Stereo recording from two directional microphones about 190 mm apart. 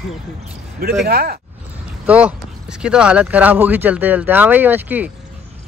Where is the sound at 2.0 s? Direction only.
5° right (ahead or behind).